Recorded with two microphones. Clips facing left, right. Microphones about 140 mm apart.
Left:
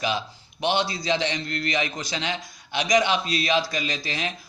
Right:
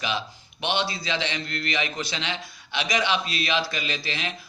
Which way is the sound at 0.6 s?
40° left (ahead or behind).